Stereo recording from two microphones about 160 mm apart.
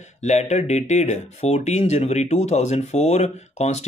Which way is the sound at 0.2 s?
45° left (ahead or behind).